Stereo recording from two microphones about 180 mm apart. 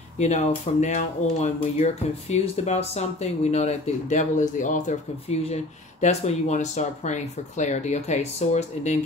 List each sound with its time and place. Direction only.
0.2 s speech: 40° left (ahead or behind)